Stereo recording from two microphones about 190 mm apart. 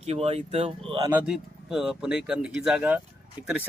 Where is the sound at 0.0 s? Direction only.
35° right (ahead or behind).